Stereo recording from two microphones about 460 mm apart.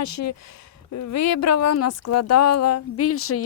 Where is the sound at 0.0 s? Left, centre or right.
Left.